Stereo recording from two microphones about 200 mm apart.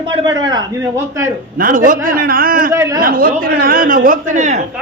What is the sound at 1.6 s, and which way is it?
A man's voice, 45° right (ahead or behind).